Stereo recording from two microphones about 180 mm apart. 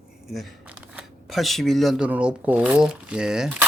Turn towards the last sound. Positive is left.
turn(degrees=-5)  # may be behind; listen again after turning